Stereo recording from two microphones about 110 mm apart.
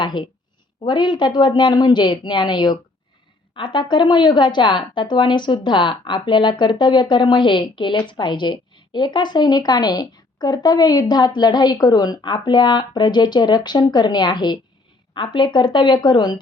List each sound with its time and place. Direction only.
0.0 s a woman's voice: 45° left (ahead or behind)